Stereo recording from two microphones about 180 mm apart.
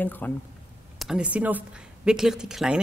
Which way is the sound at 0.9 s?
5° right (ahead or behind).